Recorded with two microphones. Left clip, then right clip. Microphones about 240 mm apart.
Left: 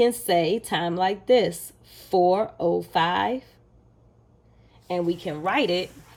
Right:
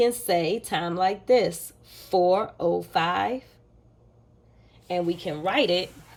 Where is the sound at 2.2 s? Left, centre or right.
Left.